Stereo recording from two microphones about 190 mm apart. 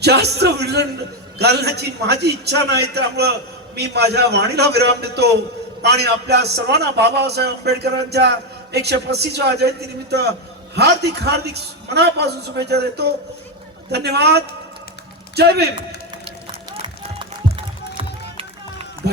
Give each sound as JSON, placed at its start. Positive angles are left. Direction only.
{"t": 0.0, "sound": "a man's voice", "side_deg": -60}